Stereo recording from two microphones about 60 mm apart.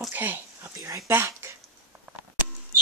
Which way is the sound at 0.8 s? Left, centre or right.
Right.